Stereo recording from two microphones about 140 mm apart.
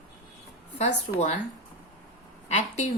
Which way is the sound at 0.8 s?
55° left (ahead or behind).